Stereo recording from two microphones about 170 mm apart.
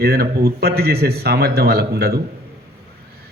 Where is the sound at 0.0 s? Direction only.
65° right (ahead or behind).